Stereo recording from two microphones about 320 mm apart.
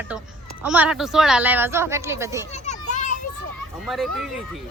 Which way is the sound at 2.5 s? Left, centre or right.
Left.